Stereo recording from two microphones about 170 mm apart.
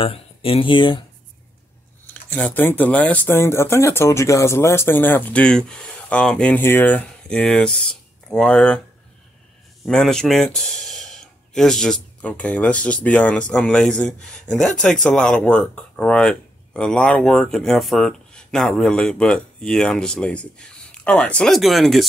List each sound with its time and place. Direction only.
0.0 s speech: 35° left (ahead or behind)
2.2 s speech: 10° left (ahead or behind)
9.8 s speech: 5° left (ahead or behind)